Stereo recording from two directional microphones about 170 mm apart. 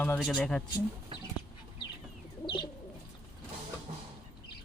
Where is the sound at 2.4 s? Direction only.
30° left (ahead or behind).